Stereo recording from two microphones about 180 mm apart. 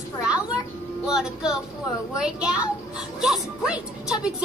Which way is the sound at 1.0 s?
5° right (ahead or behind).